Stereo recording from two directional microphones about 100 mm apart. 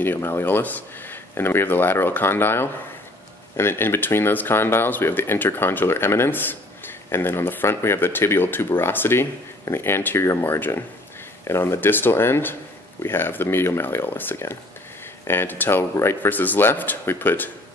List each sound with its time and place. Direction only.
0.0 s speech: 20° left (ahead or behind)